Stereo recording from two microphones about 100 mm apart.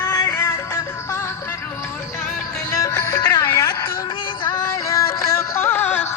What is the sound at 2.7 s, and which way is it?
Music, 35° left (ahead or behind).